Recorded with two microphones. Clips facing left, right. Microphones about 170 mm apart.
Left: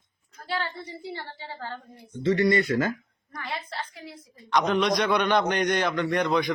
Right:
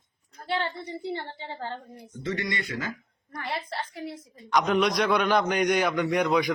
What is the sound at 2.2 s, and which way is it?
Speech, 35° left (ahead or behind).